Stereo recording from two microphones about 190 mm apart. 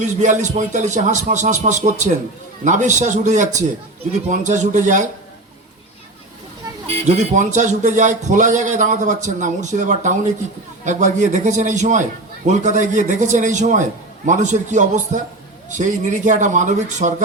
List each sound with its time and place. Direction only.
0.0 s speech: 40° right (ahead or behind)
6.9 s speech: 40° right (ahead or behind)